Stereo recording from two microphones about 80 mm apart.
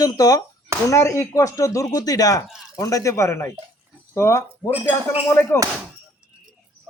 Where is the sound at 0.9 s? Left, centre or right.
Left.